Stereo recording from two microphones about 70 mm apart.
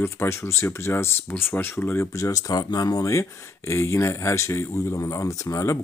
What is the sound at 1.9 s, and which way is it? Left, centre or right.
Speech, left.